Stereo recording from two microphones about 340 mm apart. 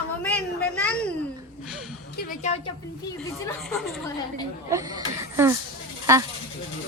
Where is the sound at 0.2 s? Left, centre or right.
Centre.